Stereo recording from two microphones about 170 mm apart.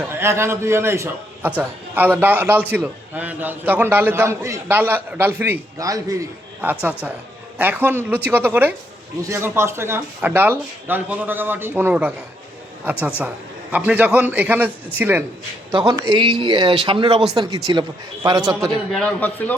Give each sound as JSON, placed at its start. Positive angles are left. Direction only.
{"t": 0.0, "sound": "a man's voice", "side_deg": -15}
{"t": 15.7, "sound": "speech", "side_deg": -25}
{"t": 18.9, "sound": "a man's voice", "side_deg": 5}